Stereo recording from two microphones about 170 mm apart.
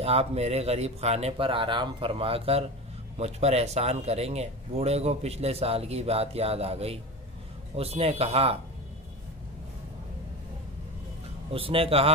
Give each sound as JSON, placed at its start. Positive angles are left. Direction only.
{"t": 0.0, "sound": "speech", "side_deg": -35}
{"t": 11.5, "sound": "speech", "side_deg": -35}